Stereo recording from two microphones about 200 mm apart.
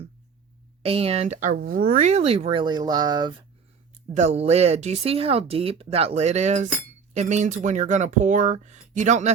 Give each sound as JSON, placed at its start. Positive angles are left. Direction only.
{"t": 0.8, "sound": "speech", "side_deg": -30}
{"t": 4.1, "sound": "speech", "side_deg": -35}